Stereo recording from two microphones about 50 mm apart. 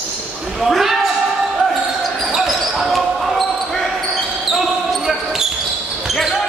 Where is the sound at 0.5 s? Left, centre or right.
Centre.